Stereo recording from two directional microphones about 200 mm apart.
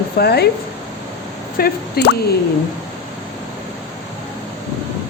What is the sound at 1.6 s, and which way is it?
Speech, 55° left (ahead or behind).